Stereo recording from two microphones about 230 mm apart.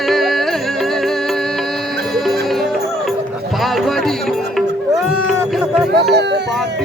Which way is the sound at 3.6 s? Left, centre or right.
Centre.